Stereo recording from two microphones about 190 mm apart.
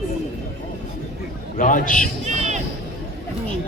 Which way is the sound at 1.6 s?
45° left (ahead or behind).